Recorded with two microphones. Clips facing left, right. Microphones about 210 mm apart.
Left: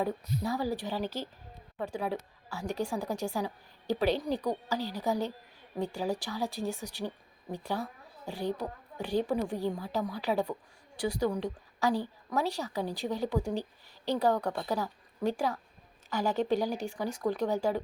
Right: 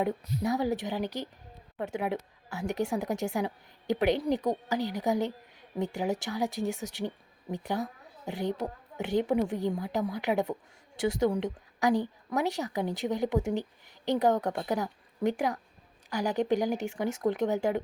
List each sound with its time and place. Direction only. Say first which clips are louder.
0.0 s a woman's voice: right 2 dB; 20° right (ahead or behind)